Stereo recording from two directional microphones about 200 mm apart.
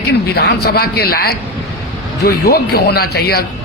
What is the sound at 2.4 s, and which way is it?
Speech, 50° left (ahead or behind).